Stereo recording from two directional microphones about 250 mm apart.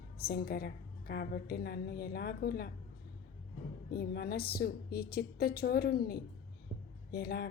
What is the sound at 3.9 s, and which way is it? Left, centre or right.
A woman's voice, left.